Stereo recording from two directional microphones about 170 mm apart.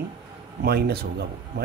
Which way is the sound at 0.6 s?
65° right (ahead or behind).